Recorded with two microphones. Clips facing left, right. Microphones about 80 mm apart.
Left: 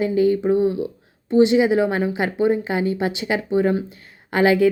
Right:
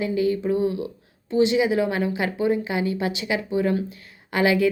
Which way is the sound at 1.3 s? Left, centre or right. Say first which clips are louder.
Left 4 dB; left.